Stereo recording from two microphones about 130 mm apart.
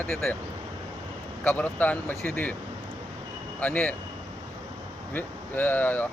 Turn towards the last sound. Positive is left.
turn(degrees=15)  # may be behind; listen again after turning